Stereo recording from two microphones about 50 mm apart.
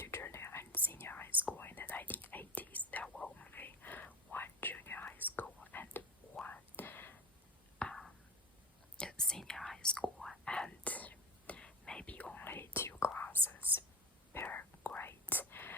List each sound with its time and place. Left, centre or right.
0.0 s whispering: left
7.8 s a sound: left
9.0 s whispering: centre
10.8 s whispering: left
13.3 s whispering: right
14.3 s whispering: left